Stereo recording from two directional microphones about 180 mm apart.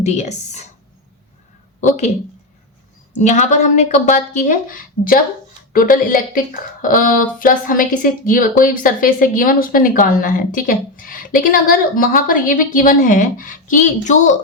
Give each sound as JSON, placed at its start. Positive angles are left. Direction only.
{"t": 0.0, "sound": "speech", "side_deg": 40}
{"t": 3.1, "sound": "a woman's voice", "side_deg": 40}